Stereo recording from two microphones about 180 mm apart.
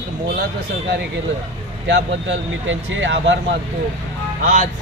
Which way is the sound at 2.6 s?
90° right.